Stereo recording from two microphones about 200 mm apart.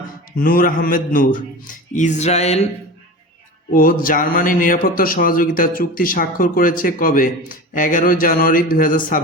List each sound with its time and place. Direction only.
0.4 s a man's voice: 45° left (ahead or behind)
3.7 s a man's voice: 45° left (ahead or behind)